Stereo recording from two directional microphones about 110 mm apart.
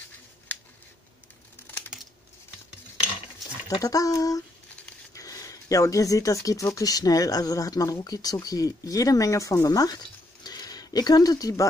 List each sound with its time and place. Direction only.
3.6 s speech: 30° left (ahead or behind)